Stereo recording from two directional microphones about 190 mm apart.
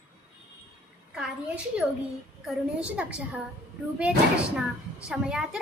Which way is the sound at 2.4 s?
5° right (ahead or behind).